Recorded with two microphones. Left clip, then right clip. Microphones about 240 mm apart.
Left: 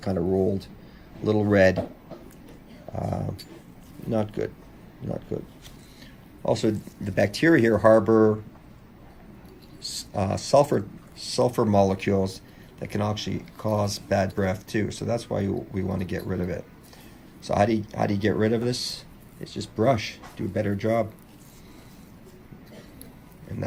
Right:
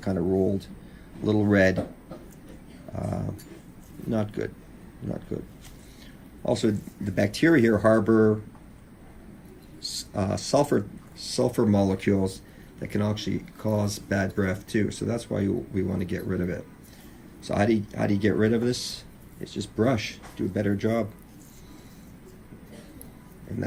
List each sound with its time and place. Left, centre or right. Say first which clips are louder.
0.0 s speech: left 1 dB; left
2.9 s speech: left 2 dB; left
6.4 s speech: left 1 dB; left
10.1 s speech: left 3 dB; left